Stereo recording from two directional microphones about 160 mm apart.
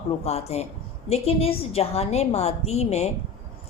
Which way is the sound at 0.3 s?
40° left (ahead or behind).